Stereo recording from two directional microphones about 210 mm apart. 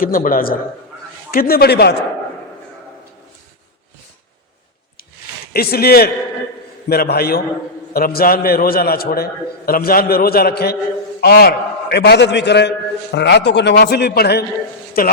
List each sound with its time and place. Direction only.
0.0 s a man's voice: 40° left (ahead or behind)
5.5 s a man's voice: 45° left (ahead or behind)